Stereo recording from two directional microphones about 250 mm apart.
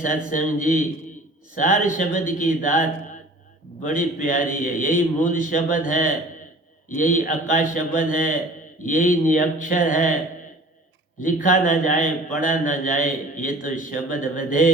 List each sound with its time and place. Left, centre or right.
0.3 s a man's voice: left
3.8 s a man's voice: left
11.2 s a man's voice: left